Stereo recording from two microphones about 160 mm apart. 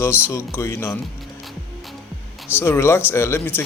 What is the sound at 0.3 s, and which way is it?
Speech, 15° left (ahead or behind).